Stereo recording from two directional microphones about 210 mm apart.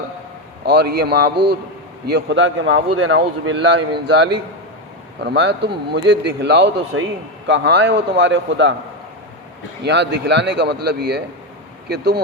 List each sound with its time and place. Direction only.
0.6 s a man's voice: 50° right (ahead or behind)
9.8 s speech: 55° right (ahead or behind)